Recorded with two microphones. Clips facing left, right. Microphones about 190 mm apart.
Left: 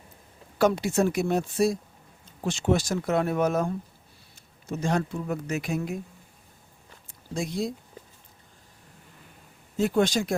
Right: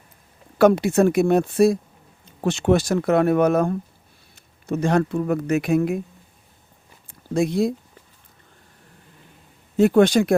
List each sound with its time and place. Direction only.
0.6 s speech: 60° right (ahead or behind)
7.1 s a sound: 60° right (ahead or behind)
9.7 s speech: 60° right (ahead or behind)